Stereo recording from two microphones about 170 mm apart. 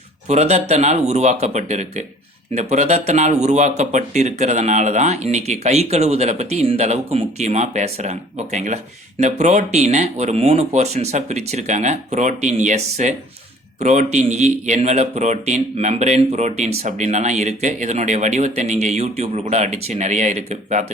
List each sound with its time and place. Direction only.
0.3 s speech: 40° right (ahead or behind)